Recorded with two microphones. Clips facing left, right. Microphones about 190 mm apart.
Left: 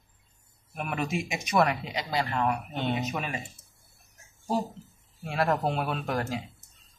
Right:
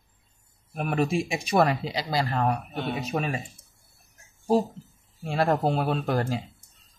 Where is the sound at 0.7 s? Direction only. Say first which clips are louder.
Right 6 dB; 35° right (ahead or behind).